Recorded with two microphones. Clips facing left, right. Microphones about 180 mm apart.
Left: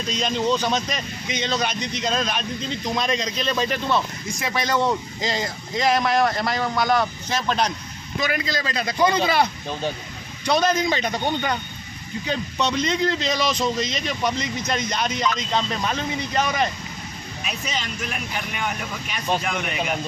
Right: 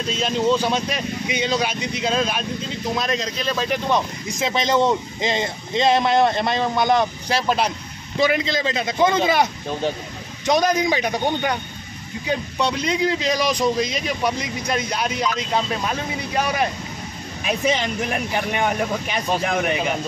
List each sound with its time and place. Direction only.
0.1 s a man's voice: 5° right (ahead or behind)
3.9 s speech: 20° right (ahead or behind)
7.2 s a man's voice: 10° right (ahead or behind)
8.2 s a man's voice: 25° right (ahead or behind)
18.5 s speech: 55° right (ahead or behind)